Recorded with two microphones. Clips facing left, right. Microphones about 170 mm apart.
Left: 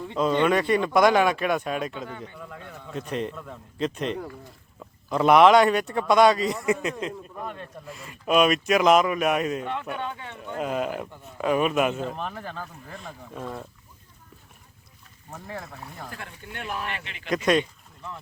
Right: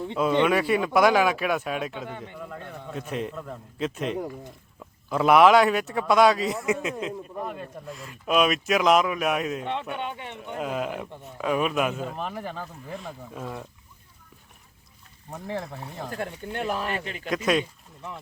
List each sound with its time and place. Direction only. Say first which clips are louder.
0.2 s speech: even; 5° right (ahead or behind)
2.0 s a man's voice: right 1 dB; 15° right (ahead or behind)
2.5 s speech: right 2 dB; centre (ahead or behind)
10.0 s speech: even; 20° right (ahead or behind)
10.6 s speech: left 2 dB; centre (ahead or behind)
15.4 s speech: right 5 dB; 25° right (ahead or behind)
16.1 s speech: right 8 dB; 35° right (ahead or behind)
17.2 s speech: left 2 dB; 5° right (ahead or behind)